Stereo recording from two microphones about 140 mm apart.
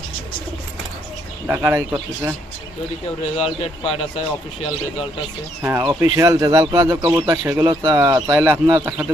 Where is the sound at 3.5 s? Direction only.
45° left (ahead or behind).